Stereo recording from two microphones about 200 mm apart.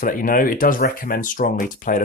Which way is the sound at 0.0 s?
45° left (ahead or behind).